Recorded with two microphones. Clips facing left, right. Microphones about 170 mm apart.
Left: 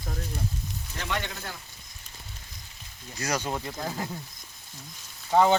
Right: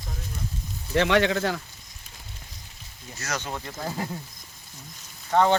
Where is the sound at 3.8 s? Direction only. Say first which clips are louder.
Right 1 dB; 5° right (ahead or behind).